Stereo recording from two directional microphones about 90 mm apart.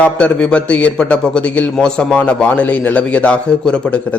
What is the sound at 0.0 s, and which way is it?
A man's voice, 10° left (ahead or behind).